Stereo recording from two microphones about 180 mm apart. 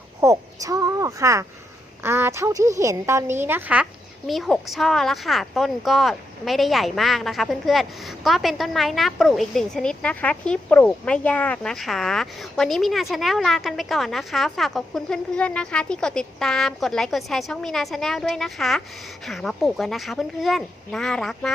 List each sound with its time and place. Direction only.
0.2 s a woman's voice: 20° right (ahead or behind)
4.3 s speech: centre (ahead or behind)